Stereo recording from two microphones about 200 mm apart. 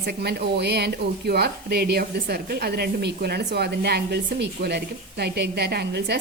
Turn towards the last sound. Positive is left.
turn(degrees=-55)  # may be behind; listen again after turning